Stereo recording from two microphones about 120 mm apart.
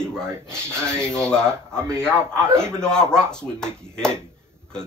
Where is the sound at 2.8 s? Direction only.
5° left (ahead or behind).